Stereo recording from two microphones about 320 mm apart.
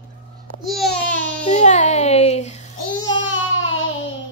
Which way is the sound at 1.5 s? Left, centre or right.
Left.